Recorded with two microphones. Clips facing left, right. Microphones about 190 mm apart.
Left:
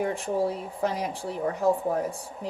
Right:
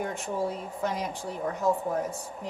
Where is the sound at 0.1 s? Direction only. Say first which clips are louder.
Left 4 dB; 35° left (ahead or behind).